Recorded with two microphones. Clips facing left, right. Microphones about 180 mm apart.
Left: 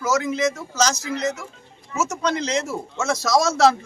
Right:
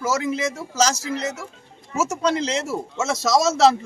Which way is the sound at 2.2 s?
30° right (ahead or behind).